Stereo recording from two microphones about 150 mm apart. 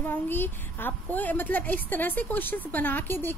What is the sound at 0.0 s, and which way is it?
Speech, 15° left (ahead or behind).